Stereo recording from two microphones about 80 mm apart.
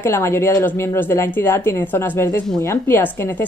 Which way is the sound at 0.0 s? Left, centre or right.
Left.